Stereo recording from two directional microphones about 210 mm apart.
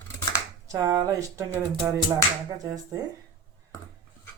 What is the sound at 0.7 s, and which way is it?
Speech, 15° right (ahead or behind).